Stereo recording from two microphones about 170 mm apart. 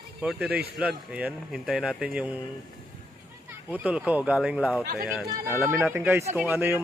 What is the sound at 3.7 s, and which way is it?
Speech, 10° right (ahead or behind).